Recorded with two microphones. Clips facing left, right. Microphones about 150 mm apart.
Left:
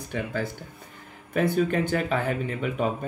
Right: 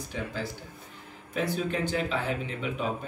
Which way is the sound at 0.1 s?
55° left (ahead or behind).